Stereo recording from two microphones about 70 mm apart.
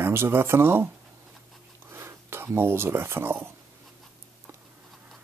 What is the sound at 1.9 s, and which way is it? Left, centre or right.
Speech, right.